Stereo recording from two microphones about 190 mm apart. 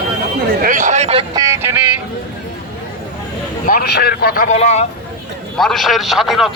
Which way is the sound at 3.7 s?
55° left (ahead or behind).